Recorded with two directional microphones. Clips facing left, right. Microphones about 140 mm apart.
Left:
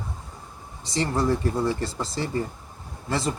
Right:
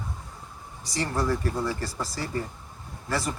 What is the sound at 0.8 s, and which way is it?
Speech, 25° left (ahead or behind).